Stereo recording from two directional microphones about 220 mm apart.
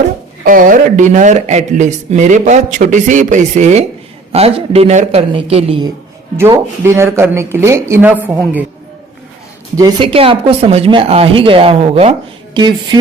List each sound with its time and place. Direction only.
0.4 s speech: 40° right (ahead or behind)
6.3 s speech: 10° right (ahead or behind)
9.7 s speech: 20° right (ahead or behind)